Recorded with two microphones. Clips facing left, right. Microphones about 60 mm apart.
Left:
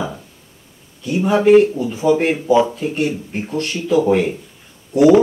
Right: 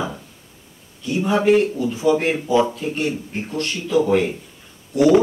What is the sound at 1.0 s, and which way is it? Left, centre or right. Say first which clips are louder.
A man's voice: left 3 dB; centre.